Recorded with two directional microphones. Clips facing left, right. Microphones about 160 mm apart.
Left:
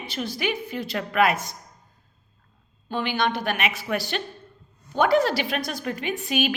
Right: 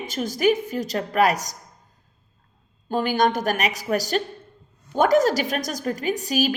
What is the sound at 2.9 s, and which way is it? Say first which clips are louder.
A woman's voice: right 4 dB; 45° right (ahead or behind).